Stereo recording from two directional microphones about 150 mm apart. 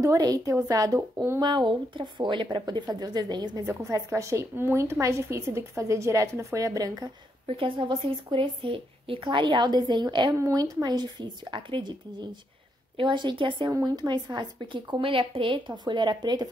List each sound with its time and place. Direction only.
0.0 s a woman's voice: 25° right (ahead or behind)
1.4 s a woman's voice: 30° right (ahead or behind)
7.4 s a woman's voice: 35° right (ahead or behind)